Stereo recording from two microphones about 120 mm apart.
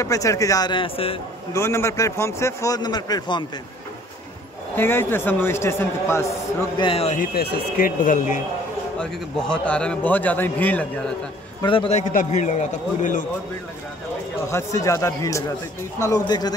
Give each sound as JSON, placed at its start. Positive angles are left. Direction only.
{"t": 0.0, "sound": "speech", "side_deg": 25}
{"t": 1.5, "sound": "a man's voice", "side_deg": 25}
{"t": 4.7, "sound": "a man's voice", "side_deg": 20}
{"t": 6.8, "sound": "a man's voice", "side_deg": 50}
{"t": 8.0, "sound": "a man's voice", "side_deg": 90}
{"t": 9.0, "sound": "a man's voice", "side_deg": 10}
{"t": 11.6, "sound": "a man's voice", "side_deg": 45}
{"t": 11.9, "sound": "a man's voice", "side_deg": 90}
{"t": 14.5, "sound": "a man's voice", "side_deg": 30}